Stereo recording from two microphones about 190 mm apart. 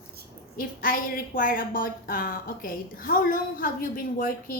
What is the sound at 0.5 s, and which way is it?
A woman's voice, 50° left (ahead or behind).